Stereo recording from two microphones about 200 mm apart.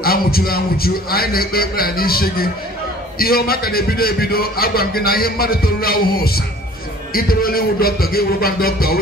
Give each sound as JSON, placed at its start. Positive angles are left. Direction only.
{"t": 0.0, "sound": "a man's voice", "side_deg": 50}